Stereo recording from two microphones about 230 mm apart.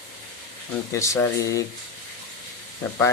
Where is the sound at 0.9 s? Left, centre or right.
Centre.